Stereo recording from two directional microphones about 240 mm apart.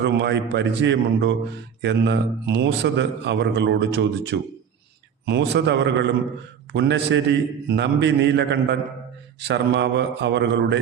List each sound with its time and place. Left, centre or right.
0.0 s a man's voice: right